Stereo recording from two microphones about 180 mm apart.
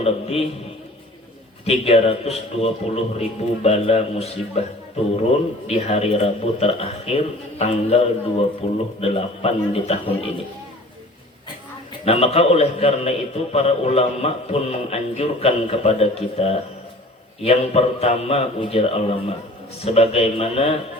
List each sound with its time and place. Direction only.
0.0 s a man's voice: 35° left (ahead or behind)
1.6 s a man's voice: 35° left (ahead or behind)
5.6 s a man's voice: 35° left (ahead or behind)
12.0 s a man's voice: 35° left (ahead or behind)